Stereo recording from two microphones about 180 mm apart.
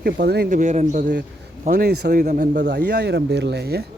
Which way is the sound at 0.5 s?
45° right (ahead or behind).